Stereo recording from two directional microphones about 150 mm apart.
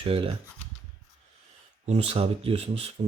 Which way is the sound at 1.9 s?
40° right (ahead or behind).